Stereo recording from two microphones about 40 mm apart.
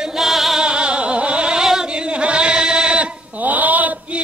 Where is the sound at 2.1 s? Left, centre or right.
Right.